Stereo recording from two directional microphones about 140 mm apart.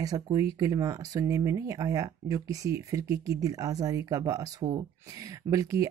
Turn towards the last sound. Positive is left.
turn(degrees=-25)  # may be behind; listen again after turning